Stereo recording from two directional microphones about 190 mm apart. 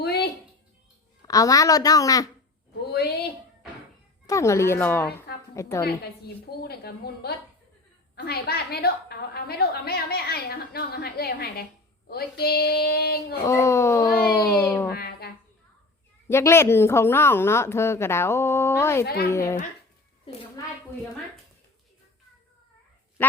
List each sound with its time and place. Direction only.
0.0 s a sound: 55° left (ahead or behind)
1.3 s a woman's voice: 20° left (ahead or behind)
2.8 s a woman's voice: 60° left (ahead or behind)
4.3 s a woman's voice: 15° left (ahead or behind)
5.8 s a woman's voice: 55° left (ahead or behind)
13.4 s a woman's voice: 15° left (ahead or behind)
14.1 s speech: 55° left (ahead or behind)
14.6 s a woman's voice: 5° left (ahead or behind)
14.9 s a sound: 55° left (ahead or behind)
16.3 s a woman's voice: 15° left (ahead or behind)
19.0 s a woman's voice: 55° left (ahead or behind)
19.3 s a woman's voice: 15° left (ahead or behind)
20.6 s a woman's voice: 20° left (ahead or behind)